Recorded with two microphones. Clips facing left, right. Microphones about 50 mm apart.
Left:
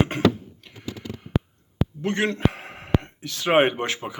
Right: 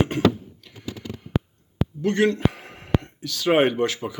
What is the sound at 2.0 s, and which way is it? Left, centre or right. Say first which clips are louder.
Speech: right 3 dB; left.